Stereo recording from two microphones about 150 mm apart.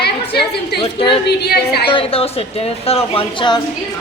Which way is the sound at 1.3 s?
90° left.